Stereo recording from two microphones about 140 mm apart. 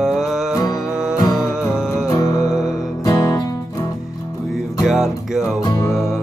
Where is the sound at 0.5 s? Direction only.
25° left (ahead or behind).